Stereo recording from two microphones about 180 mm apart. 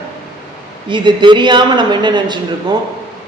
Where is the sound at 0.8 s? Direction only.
25° right (ahead or behind).